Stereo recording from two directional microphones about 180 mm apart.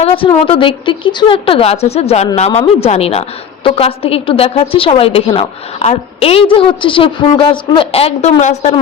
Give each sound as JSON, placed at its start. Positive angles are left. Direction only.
{"t": 0.4, "sound": "speech", "side_deg": 30}